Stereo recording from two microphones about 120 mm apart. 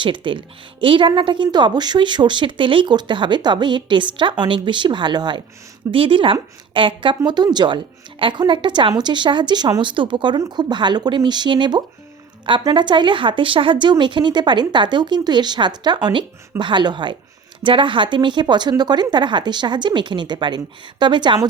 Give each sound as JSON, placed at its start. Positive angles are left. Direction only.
{"t": 0.0, "sound": "a woman's voice", "side_deg": -45}